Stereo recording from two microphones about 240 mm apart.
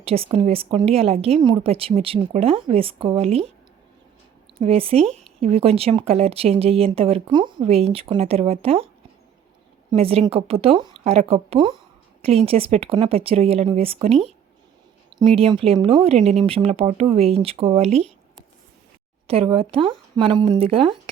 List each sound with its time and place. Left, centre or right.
0.0 s speech: right
4.6 s speech: right
9.9 s speech: right
15.4 s speech: right